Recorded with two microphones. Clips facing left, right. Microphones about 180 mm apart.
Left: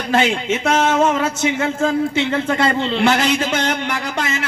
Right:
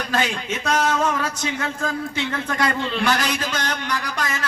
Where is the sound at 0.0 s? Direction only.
25° left (ahead or behind).